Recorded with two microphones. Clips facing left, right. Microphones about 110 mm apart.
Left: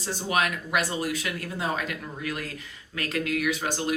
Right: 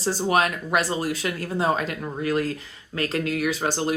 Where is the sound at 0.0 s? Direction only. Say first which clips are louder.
Right 5 dB; 35° right (ahead or behind).